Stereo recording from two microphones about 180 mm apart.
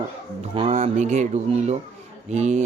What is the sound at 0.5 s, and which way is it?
Speech, 35° right (ahead or behind).